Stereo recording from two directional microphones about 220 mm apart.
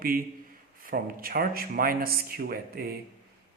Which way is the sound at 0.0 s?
40° right (ahead or behind).